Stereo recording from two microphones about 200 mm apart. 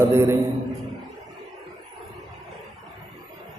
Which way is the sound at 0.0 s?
15° right (ahead or behind).